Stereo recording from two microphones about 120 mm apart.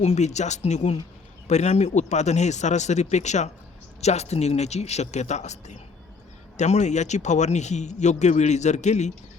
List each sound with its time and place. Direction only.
0.0 s speech: 70° left (ahead or behind)